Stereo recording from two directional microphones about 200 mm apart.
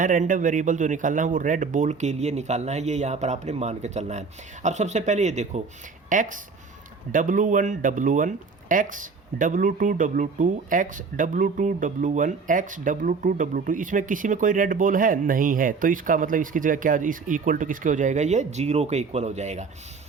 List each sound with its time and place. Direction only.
0.0 s speech: 40° right (ahead or behind)